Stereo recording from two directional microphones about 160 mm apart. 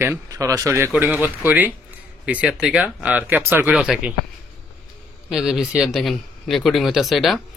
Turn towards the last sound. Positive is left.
turn(degrees=0)  # may be behind; listen again after turning